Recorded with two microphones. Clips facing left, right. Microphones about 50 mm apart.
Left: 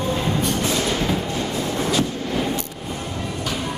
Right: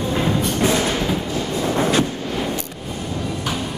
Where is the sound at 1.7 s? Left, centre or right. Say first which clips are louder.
Right 4 dB; right.